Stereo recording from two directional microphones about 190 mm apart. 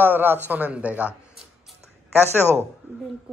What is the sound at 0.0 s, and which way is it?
Speech, 10° right (ahead or behind).